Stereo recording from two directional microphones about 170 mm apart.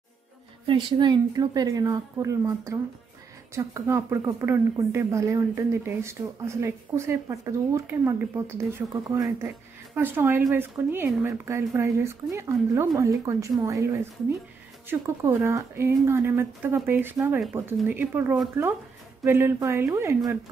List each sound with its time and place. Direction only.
0.7 s a woman's voice: 30° right (ahead or behind)